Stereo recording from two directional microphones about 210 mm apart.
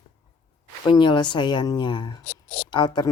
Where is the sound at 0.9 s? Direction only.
20° left (ahead or behind).